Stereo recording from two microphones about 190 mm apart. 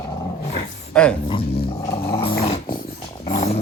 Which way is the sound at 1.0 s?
5° left (ahead or behind).